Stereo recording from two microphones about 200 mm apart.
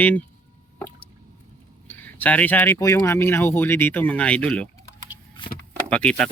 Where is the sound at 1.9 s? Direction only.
10° left (ahead or behind).